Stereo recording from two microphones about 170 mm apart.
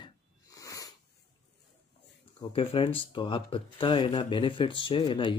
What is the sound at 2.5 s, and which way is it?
Speech, 30° left (ahead or behind).